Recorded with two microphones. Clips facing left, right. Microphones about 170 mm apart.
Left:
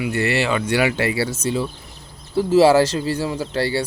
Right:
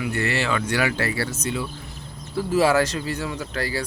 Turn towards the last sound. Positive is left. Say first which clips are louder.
# left 6 dB
turn(degrees=30)  # may be behind; listen again after turning